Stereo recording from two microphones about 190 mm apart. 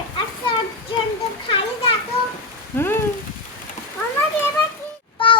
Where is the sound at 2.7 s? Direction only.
10° left (ahead or behind).